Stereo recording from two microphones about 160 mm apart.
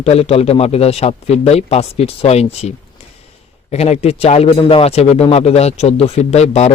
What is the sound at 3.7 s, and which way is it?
Speech, 40° left (ahead or behind).